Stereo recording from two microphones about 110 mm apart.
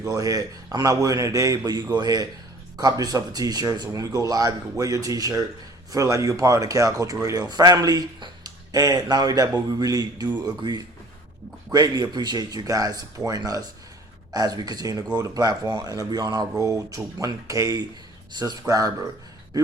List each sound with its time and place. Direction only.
0.0 s speech: 30° right (ahead or behind)